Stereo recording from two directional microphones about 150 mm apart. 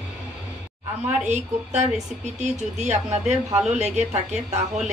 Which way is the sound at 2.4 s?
50° right (ahead or behind).